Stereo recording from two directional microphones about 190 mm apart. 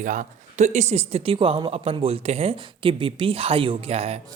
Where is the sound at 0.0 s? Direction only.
45° right (ahead or behind).